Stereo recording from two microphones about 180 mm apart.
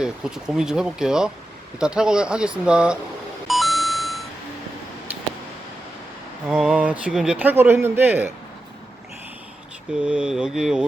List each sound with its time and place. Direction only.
0.0 s speech: 5° right (ahead or behind)
3.4 s beep: centre (ahead or behind)
6.5 s speech: 5° right (ahead or behind)
10.0 s speech: 5° right (ahead or behind)